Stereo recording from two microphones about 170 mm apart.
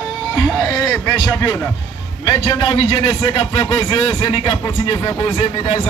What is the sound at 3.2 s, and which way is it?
Speech, 20° left (ahead or behind).